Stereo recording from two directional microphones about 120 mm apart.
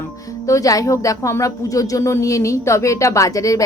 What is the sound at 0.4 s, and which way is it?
Speech, 25° left (ahead or behind).